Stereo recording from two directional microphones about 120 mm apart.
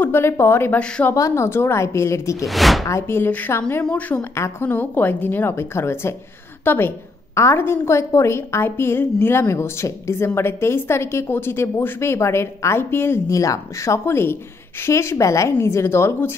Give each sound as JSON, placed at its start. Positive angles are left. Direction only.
{"t": 0.0, "sound": "a woman's voice", "side_deg": 20}
{"t": 1.1, "sound": "a woman's voice", "side_deg": 25}
{"t": 2.4, "sound": "speech", "side_deg": 0}
{"t": 2.8, "sound": "a woman's voice", "side_deg": 25}